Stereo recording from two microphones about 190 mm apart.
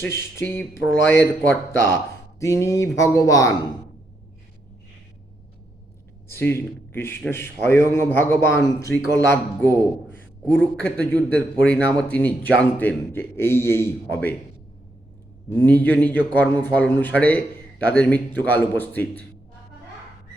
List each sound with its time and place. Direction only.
0.0 s a man's voice: 15° left (ahead or behind)
6.3 s a man's voice: 10° left (ahead or behind)
15.4 s a man's voice: 10° left (ahead or behind)